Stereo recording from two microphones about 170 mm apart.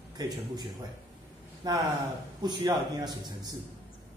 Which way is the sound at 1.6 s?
25° right (ahead or behind).